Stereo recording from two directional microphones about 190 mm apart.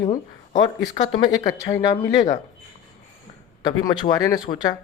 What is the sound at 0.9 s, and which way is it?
Speech, 30° left (ahead or behind).